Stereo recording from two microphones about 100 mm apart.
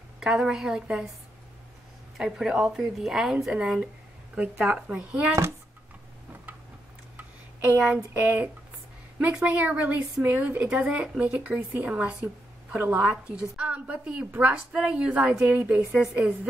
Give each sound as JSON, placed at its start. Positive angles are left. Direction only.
{"t": 0.2, "sound": "a woman's voice", "side_deg": -5}
{"t": 2.1, "sound": "a woman's voice", "side_deg": -5}
{"t": 7.2, "sound": "a sound", "side_deg": -15}
{"t": 8.2, "sound": "a woman's voice", "side_deg": -20}